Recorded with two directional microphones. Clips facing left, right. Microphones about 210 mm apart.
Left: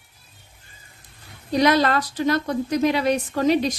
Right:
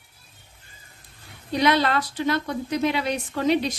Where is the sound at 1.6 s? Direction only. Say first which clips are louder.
Left 2 dB; 40° left (ahead or behind).